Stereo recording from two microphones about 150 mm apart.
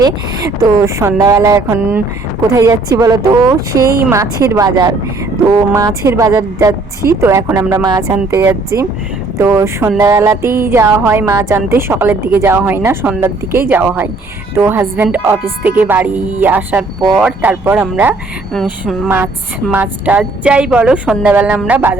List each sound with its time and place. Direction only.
0.0 s speech: 25° right (ahead or behind)
18.5 s speech: centre (ahead or behind)
19.0 s speech: 15° right (ahead or behind)